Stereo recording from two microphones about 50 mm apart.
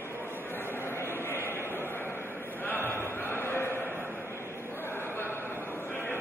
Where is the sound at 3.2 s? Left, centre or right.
Left.